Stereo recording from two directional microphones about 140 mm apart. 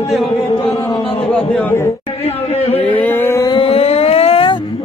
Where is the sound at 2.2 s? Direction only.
45° left (ahead or behind).